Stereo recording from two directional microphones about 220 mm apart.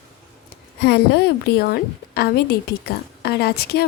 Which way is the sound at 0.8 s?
50° left (ahead or behind).